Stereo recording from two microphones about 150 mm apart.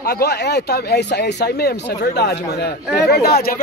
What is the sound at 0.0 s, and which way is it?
Speech, 90° left.